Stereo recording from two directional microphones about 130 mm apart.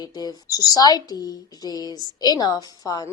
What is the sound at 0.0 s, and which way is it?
A woman's voice, 30° left (ahead or behind).